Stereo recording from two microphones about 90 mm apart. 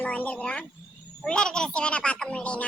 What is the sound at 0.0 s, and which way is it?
A child's voice, 15° left (ahead or behind).